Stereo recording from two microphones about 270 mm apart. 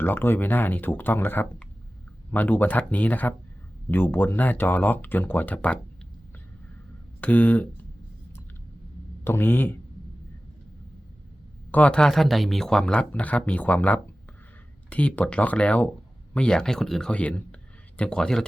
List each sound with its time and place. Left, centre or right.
0.0 s speech: centre
7.2 s speech: centre
9.2 s speech: centre
11.7 s speech: centre